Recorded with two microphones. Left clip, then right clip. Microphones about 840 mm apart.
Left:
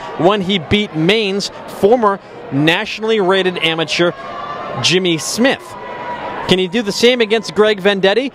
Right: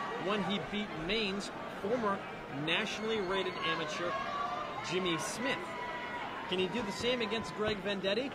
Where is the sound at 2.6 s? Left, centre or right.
Left.